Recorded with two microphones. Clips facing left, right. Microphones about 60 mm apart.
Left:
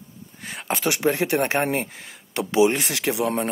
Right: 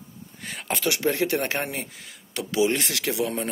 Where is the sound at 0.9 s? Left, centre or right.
Left.